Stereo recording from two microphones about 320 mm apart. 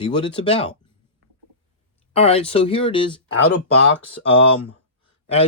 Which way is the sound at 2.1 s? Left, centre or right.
Centre.